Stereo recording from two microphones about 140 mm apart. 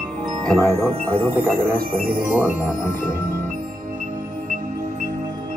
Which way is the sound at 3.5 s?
75° right (ahead or behind).